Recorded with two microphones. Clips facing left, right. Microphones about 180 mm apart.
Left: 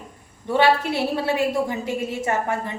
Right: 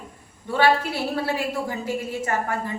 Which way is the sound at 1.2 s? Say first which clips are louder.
Left 4 dB; 20° left (ahead or behind).